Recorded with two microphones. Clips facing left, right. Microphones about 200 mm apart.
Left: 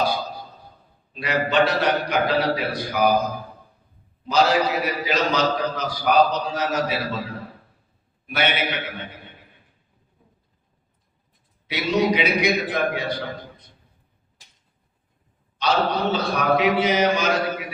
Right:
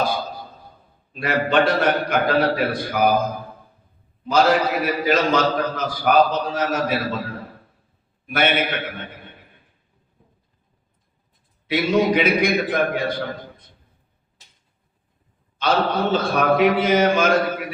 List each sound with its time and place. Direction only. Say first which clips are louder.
1.2 s a man's voice: right 2 dB; 50° right (ahead or behind)
4.3 s a man's voice: right 2 dB; 50° right (ahead or behind)
8.3 s a man's voice: right 3 dB; 50° right (ahead or behind)
11.7 s a man's voice: right 3 dB; 50° right (ahead or behind)
15.5 s a man's voice: right 2 dB; 50° right (ahead or behind)